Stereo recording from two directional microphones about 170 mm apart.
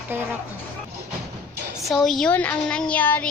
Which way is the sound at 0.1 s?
10° right (ahead or behind).